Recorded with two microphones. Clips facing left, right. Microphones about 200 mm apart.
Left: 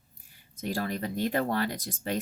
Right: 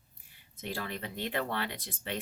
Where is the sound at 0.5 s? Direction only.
40° left (ahead or behind).